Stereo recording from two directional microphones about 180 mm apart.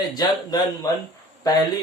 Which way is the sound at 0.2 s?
20° left (ahead or behind).